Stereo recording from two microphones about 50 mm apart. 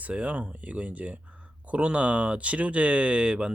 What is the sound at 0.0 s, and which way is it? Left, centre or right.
Speech, right.